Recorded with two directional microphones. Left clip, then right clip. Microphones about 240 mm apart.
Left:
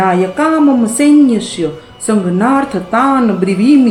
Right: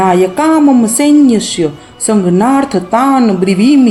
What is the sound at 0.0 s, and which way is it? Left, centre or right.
A woman's voice, right.